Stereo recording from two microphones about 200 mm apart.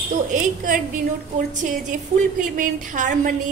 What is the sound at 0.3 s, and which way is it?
A woman's voice, 40° right (ahead or behind).